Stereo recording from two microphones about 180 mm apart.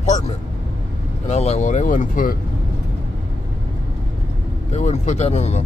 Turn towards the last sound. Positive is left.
turn(degrees=40)  # may be behind; listen again after turning